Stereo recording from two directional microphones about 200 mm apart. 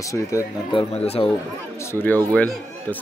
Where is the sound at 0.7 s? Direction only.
25° left (ahead or behind).